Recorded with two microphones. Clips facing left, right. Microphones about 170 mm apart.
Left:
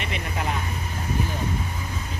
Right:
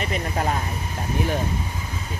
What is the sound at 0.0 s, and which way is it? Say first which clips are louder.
Speech: right 4 dB; 40° right (ahead or behind).